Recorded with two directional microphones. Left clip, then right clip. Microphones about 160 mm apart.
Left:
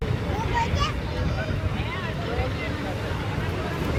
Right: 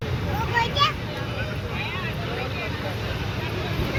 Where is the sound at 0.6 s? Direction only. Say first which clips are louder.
Right 6 dB; 10° right (ahead or behind).